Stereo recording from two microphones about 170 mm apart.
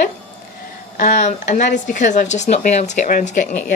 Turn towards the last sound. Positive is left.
turn(degrees=50)  # may be behind; listen again after turning